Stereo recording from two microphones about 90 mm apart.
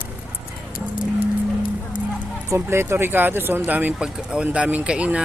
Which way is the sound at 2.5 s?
25° right (ahead or behind).